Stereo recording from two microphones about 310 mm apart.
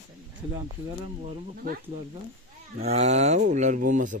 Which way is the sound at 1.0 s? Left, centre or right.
Right.